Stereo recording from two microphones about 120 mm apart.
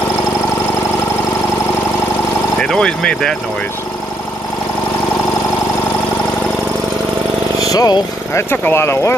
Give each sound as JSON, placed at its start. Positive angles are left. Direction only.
{"t": 2.6, "sound": "speech", "side_deg": 5}
{"t": 7.7, "sound": "speech", "side_deg": 35}
{"t": 8.3, "sound": "speech", "side_deg": 20}